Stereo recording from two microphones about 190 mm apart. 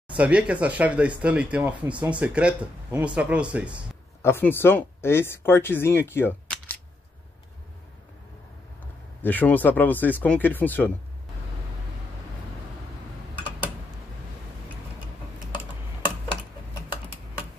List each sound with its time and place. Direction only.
0.1 s speech: 5° right (ahead or behind)
4.2 s speech: 10° left (ahead or behind)
9.2 s speech: 10° left (ahead or behind)